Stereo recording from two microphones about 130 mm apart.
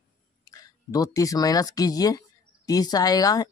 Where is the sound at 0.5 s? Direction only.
30° left (ahead or behind).